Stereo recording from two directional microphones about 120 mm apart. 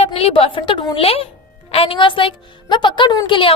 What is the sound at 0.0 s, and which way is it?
A woman's voice, 55° left (ahead or behind).